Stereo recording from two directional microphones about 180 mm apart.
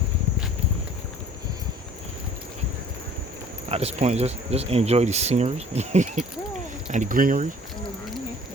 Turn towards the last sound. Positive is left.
turn(degrees=-50)  # may be behind; listen again after turning